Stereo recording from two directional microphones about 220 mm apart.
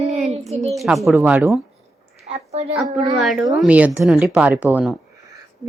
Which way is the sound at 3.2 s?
Centre (ahead or behind).